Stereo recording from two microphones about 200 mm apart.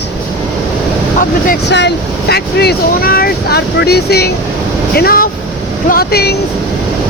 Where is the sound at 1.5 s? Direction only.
60° left (ahead or behind).